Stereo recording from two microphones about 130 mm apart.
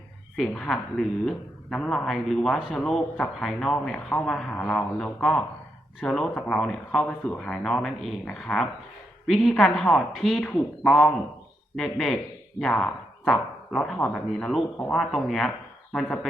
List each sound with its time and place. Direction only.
0.3 s a woman's voice: 5° left (ahead or behind)